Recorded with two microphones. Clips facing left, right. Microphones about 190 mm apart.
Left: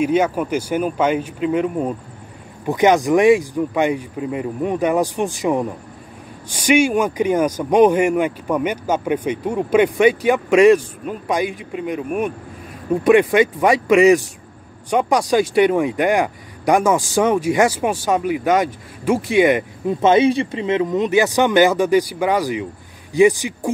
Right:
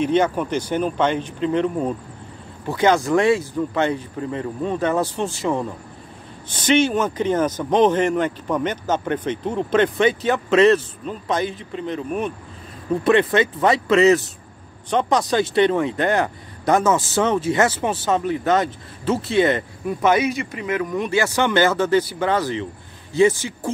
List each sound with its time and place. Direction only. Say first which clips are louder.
0.0 s speech: left 1 dB; 10° left (ahead or behind)